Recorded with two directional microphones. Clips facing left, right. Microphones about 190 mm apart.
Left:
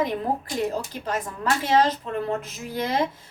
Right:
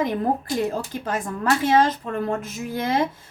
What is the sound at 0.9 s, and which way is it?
A woman's voice, 50° right (ahead or behind).